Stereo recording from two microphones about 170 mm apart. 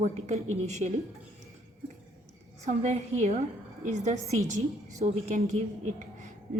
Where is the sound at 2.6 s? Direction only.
40° right (ahead or behind).